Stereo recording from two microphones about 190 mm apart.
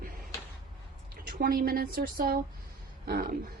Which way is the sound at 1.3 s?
50° right (ahead or behind).